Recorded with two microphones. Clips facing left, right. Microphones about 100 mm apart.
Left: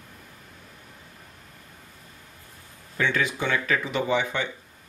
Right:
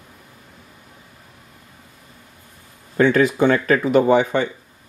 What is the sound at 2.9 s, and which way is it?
Speech, 45° right (ahead or behind).